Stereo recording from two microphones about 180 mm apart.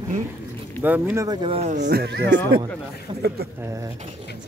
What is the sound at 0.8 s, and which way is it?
Speech, 10° right (ahead or behind).